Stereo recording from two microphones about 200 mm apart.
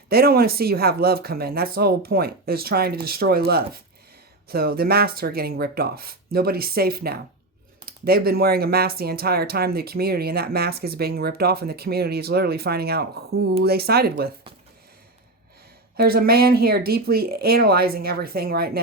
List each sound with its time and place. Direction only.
0.1 s speech: 50° right (ahead or behind)
16.0 s speech: 50° right (ahead or behind)